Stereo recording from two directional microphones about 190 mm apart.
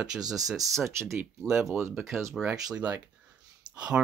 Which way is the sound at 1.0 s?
15° right (ahead or behind).